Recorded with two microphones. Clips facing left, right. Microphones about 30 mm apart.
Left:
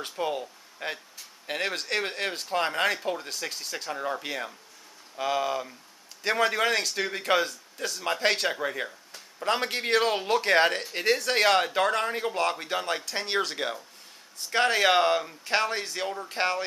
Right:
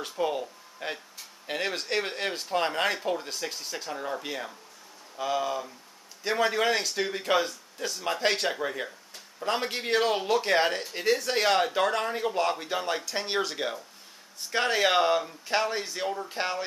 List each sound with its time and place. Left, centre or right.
0.1 s speech: centre